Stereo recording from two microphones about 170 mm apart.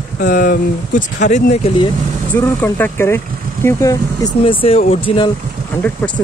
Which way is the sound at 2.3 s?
10° left (ahead or behind).